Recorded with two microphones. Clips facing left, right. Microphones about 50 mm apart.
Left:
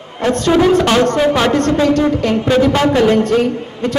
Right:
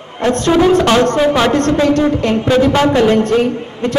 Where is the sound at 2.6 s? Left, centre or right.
Right.